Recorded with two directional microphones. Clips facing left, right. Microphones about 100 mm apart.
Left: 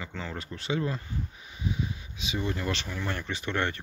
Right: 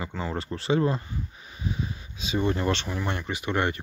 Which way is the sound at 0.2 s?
35° right (ahead or behind).